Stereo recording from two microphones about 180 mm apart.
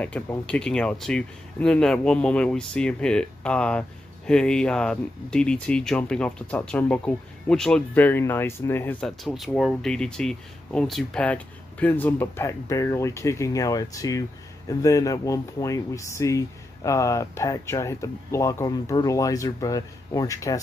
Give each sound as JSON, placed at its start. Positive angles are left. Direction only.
{"t": 0.0, "sound": "speech", "side_deg": 10}
{"t": 9.2, "sound": "speech", "side_deg": 0}